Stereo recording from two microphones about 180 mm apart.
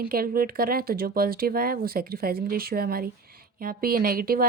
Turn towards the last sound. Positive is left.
turn(degrees=-55)  # may be behind; listen again after turning